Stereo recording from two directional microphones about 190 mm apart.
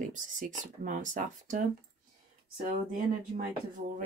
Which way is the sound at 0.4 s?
40° right (ahead or behind).